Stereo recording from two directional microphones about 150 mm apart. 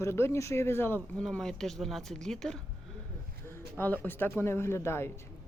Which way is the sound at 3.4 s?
15° left (ahead or behind).